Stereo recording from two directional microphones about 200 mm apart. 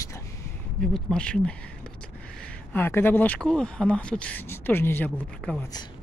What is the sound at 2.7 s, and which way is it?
Speech, 10° left (ahead or behind).